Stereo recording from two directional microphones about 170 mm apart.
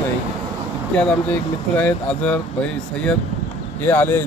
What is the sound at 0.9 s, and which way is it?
Speech, 5° left (ahead or behind).